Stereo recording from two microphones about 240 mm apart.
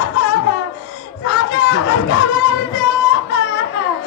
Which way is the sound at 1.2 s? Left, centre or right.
Left.